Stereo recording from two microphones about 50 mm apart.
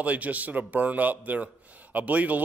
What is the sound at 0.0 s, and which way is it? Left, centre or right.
Speech, right.